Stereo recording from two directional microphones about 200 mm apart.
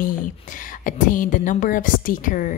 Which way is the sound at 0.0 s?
40° left (ahead or behind).